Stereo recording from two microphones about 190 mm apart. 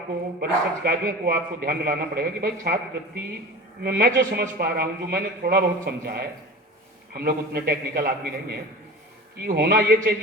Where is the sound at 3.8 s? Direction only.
50° right (ahead or behind).